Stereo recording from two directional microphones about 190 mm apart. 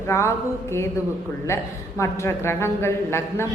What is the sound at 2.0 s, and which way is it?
A woman's voice, 15° left (ahead or behind).